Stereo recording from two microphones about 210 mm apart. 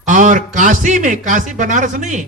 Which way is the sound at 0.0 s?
35° right (ahead or behind).